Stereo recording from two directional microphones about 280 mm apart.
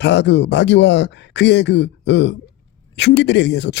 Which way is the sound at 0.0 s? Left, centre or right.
Left.